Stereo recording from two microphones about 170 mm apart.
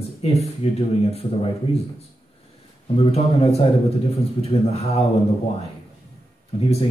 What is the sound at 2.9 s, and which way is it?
Speech, 35° left (ahead or behind).